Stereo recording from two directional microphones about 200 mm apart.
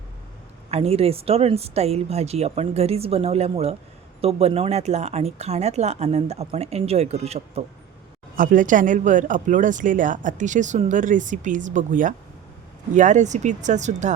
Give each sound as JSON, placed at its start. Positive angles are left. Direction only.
{"t": 0.7, "sound": "speech", "side_deg": -30}